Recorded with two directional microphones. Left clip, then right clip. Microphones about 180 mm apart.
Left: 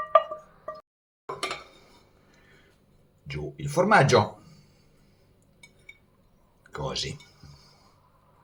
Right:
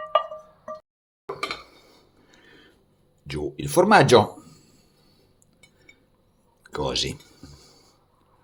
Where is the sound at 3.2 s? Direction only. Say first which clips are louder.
Right 6 dB; 55° right (ahead or behind).